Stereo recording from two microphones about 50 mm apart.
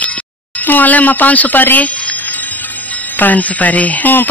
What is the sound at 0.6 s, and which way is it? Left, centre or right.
A man's voice, left.